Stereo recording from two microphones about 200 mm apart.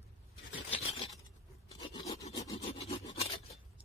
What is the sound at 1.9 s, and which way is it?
Filing, 15° left (ahead or behind).